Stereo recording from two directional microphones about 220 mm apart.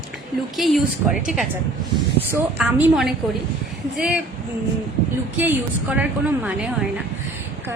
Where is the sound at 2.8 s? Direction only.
Centre (ahead or behind).